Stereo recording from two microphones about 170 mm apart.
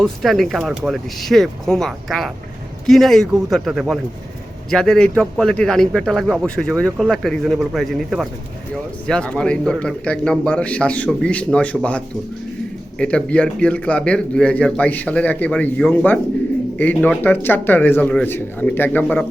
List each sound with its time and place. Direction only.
0.0 s a man's voice: centre (ahead or behind)